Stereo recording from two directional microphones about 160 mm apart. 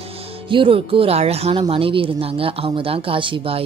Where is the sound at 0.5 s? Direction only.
35° right (ahead or behind).